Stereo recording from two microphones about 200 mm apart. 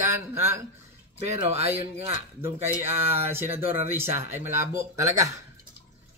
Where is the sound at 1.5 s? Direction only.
30° right (ahead or behind).